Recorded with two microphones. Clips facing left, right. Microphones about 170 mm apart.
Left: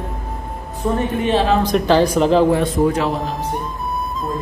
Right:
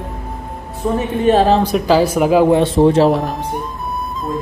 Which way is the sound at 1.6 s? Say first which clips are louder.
Right 1 dB; 5° right (ahead or behind).